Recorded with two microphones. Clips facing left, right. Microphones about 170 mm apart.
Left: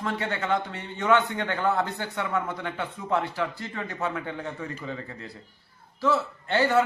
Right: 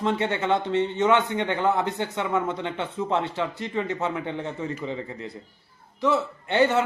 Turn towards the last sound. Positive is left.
turn(degrees=-20)  # may be behind; listen again after turning